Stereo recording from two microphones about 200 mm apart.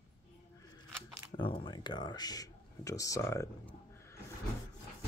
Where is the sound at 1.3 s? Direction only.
25° left (ahead or behind).